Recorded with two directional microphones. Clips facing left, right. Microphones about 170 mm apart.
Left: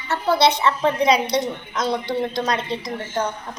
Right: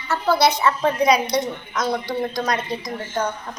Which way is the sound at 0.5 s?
30° left (ahead or behind).